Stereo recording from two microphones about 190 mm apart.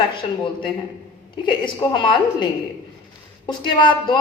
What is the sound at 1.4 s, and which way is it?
A woman's voice, 25° left (ahead or behind).